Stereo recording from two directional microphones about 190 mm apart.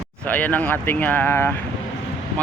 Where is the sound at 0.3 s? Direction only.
10° left (ahead or behind).